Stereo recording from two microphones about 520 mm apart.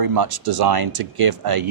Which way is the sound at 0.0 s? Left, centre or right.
Right.